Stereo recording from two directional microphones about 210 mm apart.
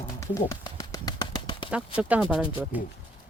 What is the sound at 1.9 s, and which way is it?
Speech, 5° right (ahead or behind).